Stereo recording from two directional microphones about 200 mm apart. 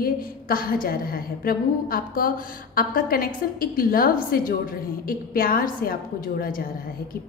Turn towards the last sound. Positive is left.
turn(degrees=45)  # may be behind; listen again after turning